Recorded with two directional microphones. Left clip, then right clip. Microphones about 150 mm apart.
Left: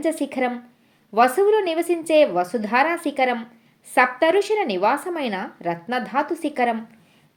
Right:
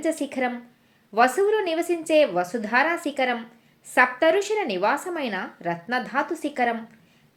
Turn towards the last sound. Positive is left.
turn(degrees=35)  # may be behind; listen again after turning